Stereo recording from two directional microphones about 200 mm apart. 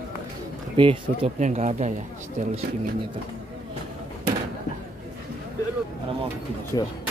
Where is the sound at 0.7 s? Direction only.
30° right (ahead or behind).